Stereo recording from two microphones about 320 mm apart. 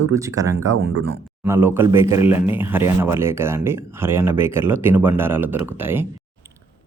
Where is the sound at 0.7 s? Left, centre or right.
Right.